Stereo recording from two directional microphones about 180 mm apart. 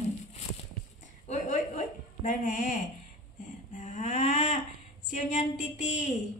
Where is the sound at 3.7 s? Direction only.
40° left (ahead or behind).